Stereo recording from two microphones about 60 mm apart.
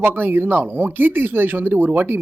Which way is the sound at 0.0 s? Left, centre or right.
Right.